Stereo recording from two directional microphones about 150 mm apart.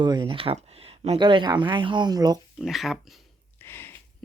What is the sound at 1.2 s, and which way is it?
Speech, 30° right (ahead or behind).